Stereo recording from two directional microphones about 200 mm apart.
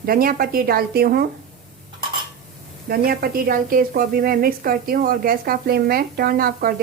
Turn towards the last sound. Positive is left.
turn(degrees=-45)  # may be behind; listen again after turning